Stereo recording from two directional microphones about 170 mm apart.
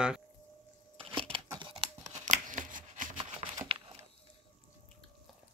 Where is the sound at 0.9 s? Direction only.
35° right (ahead or behind).